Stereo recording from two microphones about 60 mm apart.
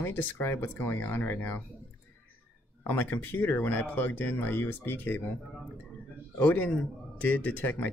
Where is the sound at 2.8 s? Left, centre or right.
Left.